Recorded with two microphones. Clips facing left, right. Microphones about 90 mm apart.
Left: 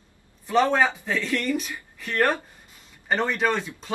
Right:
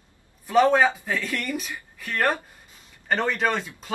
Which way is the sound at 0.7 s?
10° right (ahead or behind).